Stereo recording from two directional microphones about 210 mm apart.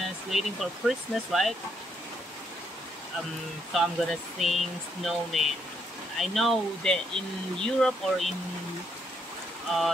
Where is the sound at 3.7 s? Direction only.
Centre (ahead or behind).